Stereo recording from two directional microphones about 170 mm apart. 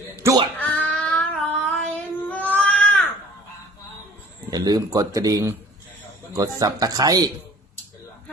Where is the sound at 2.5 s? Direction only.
5° left (ahead or behind).